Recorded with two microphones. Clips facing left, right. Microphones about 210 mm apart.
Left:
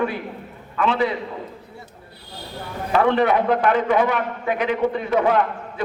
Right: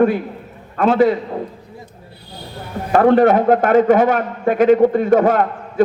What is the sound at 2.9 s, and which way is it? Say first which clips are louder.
A man's voice: right 6 dB; 45° right (ahead or behind).